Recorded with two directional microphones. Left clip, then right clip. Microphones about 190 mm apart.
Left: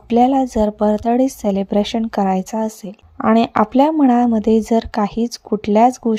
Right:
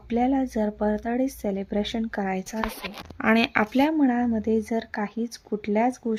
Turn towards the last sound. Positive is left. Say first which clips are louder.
# left 11 dB
turn(degrees=35)  # may be behind; listen again after turning